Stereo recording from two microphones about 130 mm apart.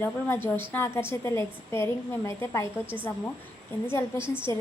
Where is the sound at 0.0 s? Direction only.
15° left (ahead or behind).